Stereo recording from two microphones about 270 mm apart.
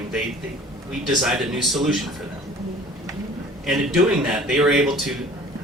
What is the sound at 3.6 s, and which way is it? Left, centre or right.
A man's voice, centre.